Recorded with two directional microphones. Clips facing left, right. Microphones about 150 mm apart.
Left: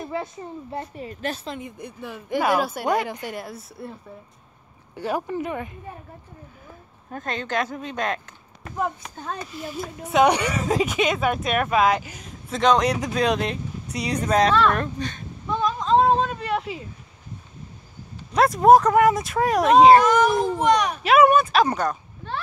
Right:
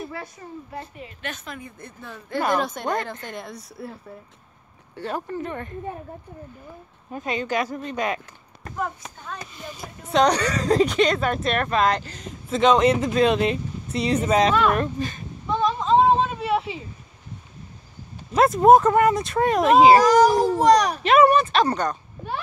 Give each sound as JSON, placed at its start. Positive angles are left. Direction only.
{"t": 0.1, "sound": "a woman's voice", "side_deg": 25}
{"t": 1.8, "sound": "speech", "side_deg": 15}
{"t": 4.9, "sound": "speech", "side_deg": 10}
{"t": 7.1, "sound": "speech", "side_deg": -5}
{"t": 9.5, "sound": "speech", "side_deg": 5}
{"t": 14.0, "sound": "a sound", "side_deg": -5}
{"t": 18.3, "sound": "speech", "side_deg": 0}
{"t": 20.0, "sound": "a child's voice", "side_deg": -35}
{"t": 21.0, "sound": "speech", "side_deg": 5}